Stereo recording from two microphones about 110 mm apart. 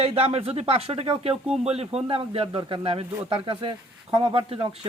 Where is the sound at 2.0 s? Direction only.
55° right (ahead or behind).